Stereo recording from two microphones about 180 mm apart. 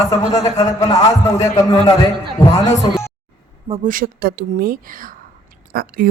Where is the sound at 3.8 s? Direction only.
50° right (ahead or behind).